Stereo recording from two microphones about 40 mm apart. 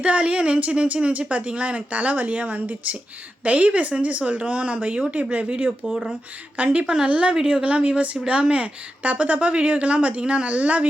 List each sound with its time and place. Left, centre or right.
0.0 s a woman's voice: right